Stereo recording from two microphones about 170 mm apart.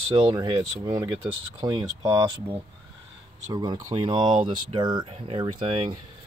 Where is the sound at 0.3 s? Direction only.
25° right (ahead or behind).